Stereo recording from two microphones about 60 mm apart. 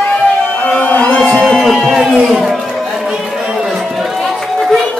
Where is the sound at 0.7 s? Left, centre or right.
Left.